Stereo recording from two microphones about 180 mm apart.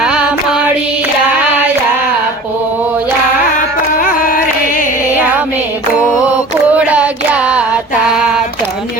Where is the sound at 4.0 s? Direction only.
50° left (ahead or behind).